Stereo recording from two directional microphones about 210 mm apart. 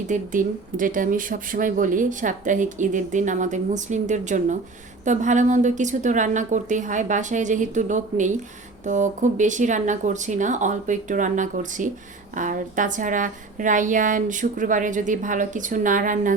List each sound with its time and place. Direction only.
0.1 s speech: 40° right (ahead or behind)